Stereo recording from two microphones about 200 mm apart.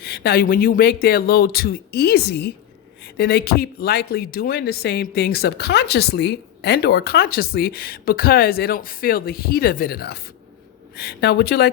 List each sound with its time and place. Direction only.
0.0 s speech: 55° left (ahead or behind)